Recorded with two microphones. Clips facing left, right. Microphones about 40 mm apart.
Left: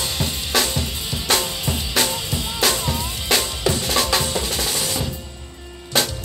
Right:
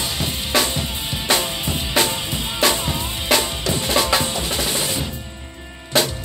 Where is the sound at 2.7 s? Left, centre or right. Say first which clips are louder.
Right 1 dB; centre.